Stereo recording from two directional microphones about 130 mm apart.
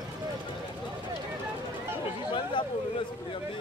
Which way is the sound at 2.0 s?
40° left (ahead or behind).